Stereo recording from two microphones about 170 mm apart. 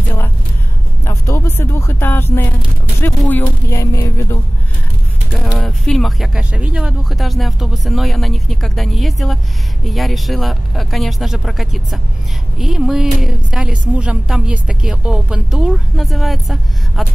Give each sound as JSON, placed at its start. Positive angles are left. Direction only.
{"t": 1.0, "sound": "speech", "side_deg": 15}
{"t": 5.4, "sound": "a woman's voice", "side_deg": 5}